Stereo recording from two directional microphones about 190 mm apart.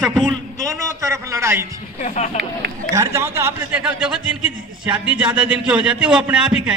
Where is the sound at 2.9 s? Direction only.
15° right (ahead or behind).